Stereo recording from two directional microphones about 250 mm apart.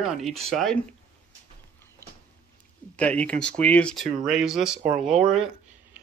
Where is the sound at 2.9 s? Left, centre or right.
Centre.